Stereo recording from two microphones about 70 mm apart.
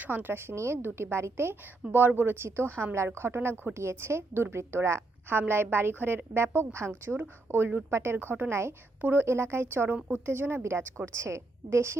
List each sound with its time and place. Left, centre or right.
0.0 s a woman's voice: right
9.0 s speech: right
9.2 s a woman's voice: right